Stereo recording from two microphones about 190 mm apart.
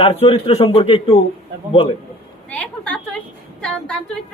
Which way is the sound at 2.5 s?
5° left (ahead or behind).